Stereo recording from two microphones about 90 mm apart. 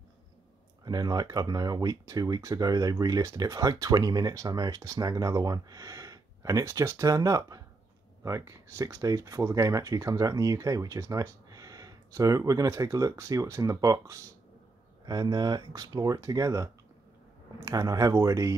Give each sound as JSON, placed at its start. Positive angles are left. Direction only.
{"t": 0.8, "sound": "speech", "side_deg": -45}